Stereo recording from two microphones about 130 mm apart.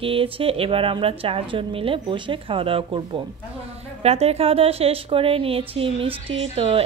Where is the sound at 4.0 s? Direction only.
55° right (ahead or behind).